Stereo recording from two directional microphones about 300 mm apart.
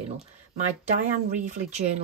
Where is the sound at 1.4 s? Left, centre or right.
Right.